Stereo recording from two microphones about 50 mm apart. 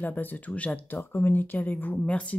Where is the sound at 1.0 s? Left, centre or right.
Left.